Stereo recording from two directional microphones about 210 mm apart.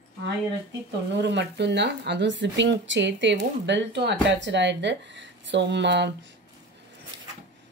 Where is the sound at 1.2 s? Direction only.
55° right (ahead or behind).